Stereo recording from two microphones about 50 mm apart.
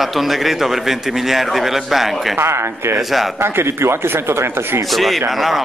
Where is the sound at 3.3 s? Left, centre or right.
Right.